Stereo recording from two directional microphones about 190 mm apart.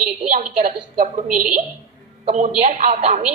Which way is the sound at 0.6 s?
45° right (ahead or behind).